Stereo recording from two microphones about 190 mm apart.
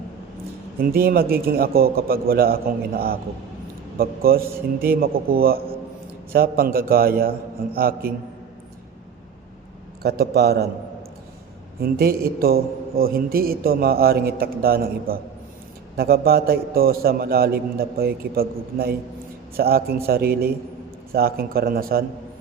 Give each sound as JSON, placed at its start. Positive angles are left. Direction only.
{"t": 0.8, "sound": "a man's voice", "side_deg": -50}
{"t": 10.0, "sound": "a man's voice", "side_deg": -55}
{"t": 11.8, "sound": "a man's voice", "side_deg": -55}